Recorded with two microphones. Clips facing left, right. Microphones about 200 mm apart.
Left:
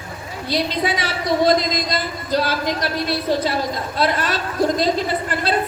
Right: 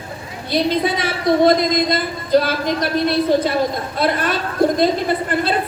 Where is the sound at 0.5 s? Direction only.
55° right (ahead or behind).